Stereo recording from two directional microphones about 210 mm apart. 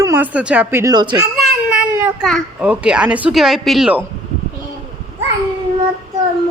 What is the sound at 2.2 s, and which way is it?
A child's voice, centre (ahead or behind).